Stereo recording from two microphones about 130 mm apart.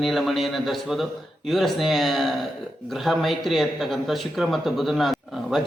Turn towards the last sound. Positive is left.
turn(degrees=0)  # may be behind; listen again after turning